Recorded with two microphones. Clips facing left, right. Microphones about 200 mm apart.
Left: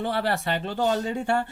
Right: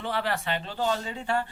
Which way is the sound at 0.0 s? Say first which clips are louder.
Left 4 dB; 40° left (ahead or behind).